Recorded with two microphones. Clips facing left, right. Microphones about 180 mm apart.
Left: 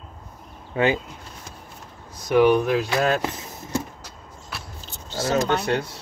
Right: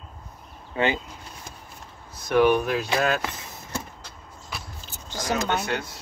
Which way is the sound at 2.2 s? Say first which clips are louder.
Left 3 dB; 15° left (ahead or behind).